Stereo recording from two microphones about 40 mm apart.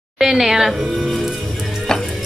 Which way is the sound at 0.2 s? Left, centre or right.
Centre.